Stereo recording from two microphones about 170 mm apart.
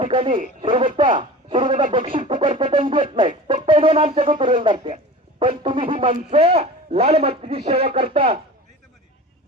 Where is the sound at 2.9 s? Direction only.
30° right (ahead or behind).